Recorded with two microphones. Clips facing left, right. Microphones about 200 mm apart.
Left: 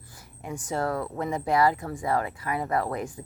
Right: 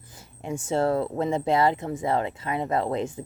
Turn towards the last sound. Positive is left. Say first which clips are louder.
# right 3 dB
turn(degrees=-25)  # may be behind; listen again after turning